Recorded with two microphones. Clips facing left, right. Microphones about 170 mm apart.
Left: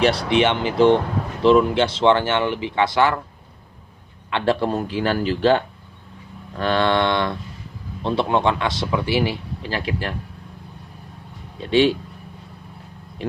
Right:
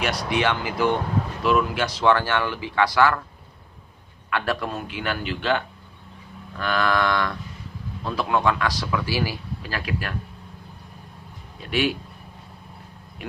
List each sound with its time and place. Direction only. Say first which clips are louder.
0.0 s speech: left 6 dB; 30° left (ahead or behind)
4.3 s a man's voice: left 6 dB; 25° left (ahead or behind)
11.6 s speech: left 7 dB; 25° left (ahead or behind)